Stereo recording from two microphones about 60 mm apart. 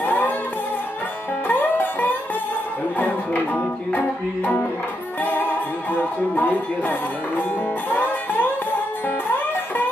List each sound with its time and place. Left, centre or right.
0.0 s music: left
1.5 s music: left
5.9 s music: left